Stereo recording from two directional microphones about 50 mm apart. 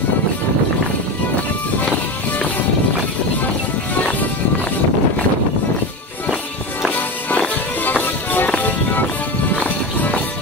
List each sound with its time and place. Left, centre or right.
7.8 s music: left